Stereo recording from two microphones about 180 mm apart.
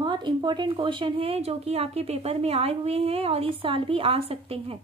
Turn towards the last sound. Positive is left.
turn(degrees=-30)  # may be behind; listen again after turning